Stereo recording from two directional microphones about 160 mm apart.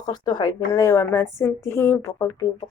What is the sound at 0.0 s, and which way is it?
A woman's voice, 25° left (ahead or behind).